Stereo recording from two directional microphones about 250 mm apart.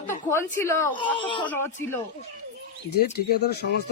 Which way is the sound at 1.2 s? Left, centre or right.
Centre.